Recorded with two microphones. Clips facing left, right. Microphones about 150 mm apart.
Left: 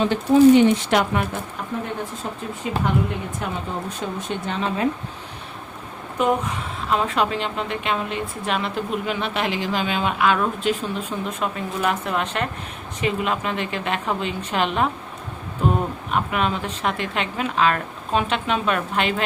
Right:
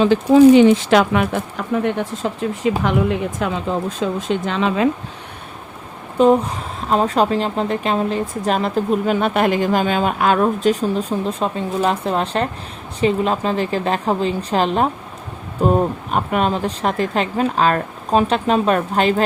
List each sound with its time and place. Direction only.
0.0 s speech: 90° right
6.1 s speech: 30° right (ahead or behind)